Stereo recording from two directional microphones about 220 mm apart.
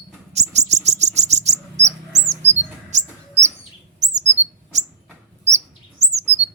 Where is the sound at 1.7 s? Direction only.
15° right (ahead or behind).